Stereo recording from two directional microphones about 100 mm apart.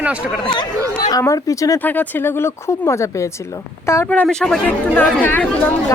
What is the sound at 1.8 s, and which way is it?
Speech, 20° left (ahead or behind).